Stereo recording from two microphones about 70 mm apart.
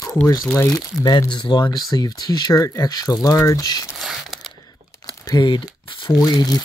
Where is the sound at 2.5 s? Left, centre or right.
Left.